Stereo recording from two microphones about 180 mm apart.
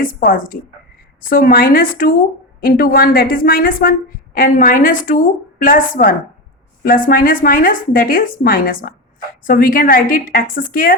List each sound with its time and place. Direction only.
0.0 s a woman's voice: 50° left (ahead or behind)